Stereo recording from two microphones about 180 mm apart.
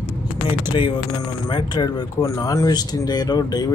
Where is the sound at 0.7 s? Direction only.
25° left (ahead or behind).